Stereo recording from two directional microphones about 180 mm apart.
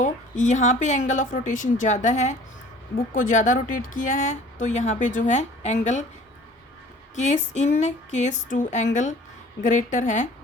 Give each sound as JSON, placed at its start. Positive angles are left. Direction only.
{"t": 0.0, "sound": "speech", "side_deg": 40}
{"t": 7.2, "sound": "speech", "side_deg": 40}